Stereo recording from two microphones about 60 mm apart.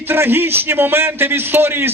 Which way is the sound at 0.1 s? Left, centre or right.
Right.